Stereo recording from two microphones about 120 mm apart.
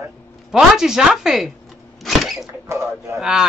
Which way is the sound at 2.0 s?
Centre (ahead or behind).